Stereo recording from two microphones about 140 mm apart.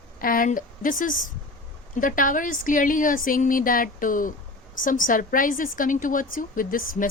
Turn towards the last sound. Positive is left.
turn(degrees=85)